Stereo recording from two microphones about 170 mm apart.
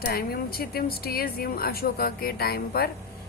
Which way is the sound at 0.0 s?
65° left (ahead or behind).